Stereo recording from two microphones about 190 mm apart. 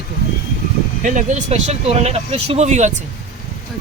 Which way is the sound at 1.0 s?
40° right (ahead or behind).